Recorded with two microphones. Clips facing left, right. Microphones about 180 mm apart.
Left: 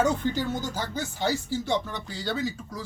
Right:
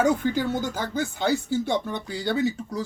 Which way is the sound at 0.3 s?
55° right (ahead or behind).